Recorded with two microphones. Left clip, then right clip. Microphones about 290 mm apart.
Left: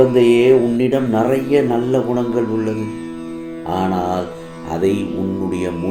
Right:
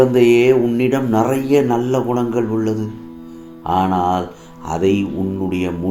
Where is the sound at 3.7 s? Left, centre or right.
Right.